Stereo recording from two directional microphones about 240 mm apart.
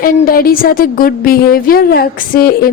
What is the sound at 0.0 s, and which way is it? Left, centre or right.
A woman's voice, left.